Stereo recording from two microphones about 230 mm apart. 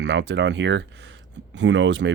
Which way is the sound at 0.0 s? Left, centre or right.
Right.